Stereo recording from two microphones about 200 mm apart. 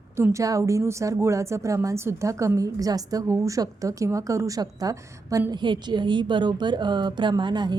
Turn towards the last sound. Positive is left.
turn(degrees=-20)  # may be behind; listen again after turning